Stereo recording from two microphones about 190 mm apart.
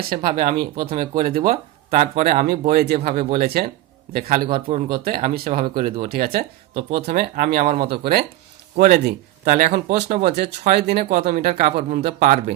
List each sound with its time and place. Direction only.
0.1 s speech: 45° right (ahead or behind)